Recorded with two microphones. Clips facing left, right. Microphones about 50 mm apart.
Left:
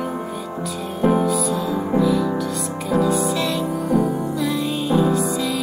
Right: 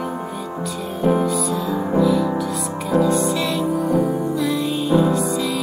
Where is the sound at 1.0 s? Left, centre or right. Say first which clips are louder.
Even; centre.